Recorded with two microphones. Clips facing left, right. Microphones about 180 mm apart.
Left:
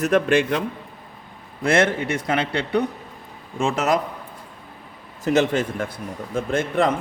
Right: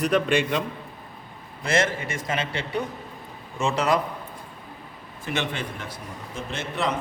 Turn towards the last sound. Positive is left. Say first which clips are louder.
# left 7 dB
turn(degrees=50)  # may be behind; listen again after turning